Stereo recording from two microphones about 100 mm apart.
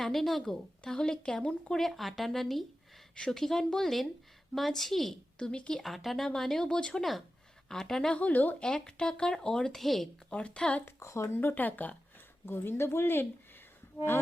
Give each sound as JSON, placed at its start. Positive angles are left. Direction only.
{"t": 0.0, "sound": "speech", "side_deg": 5}
{"t": 10.8, "sound": "speech", "side_deg": 30}
{"t": 11.3, "sound": "speech", "side_deg": 20}